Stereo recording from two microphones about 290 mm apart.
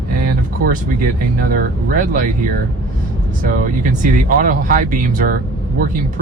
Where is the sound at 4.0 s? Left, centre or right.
Right.